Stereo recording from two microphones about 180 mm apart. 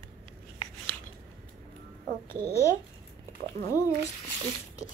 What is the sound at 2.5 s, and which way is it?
A child's voice, 15° left (ahead or behind).